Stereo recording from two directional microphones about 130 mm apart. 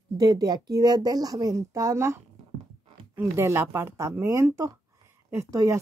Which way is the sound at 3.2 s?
20° right (ahead or behind).